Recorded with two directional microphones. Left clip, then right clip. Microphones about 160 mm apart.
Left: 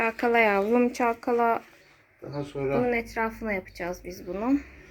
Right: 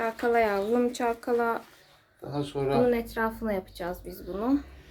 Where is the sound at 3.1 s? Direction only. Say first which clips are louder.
Even; 20° left (ahead or behind).